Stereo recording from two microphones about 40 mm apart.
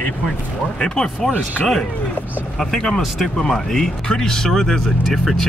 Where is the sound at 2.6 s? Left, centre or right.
Centre.